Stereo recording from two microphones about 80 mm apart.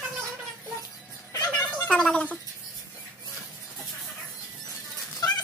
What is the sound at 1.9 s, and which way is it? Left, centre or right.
Gargling, centre.